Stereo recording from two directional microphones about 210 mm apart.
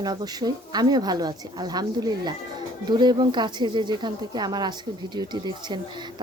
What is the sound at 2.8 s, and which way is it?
A woman's voice, 20° right (ahead or behind).